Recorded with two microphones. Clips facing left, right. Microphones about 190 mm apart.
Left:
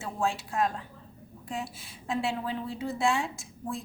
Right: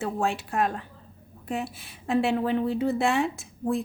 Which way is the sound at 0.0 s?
60° right (ahead or behind).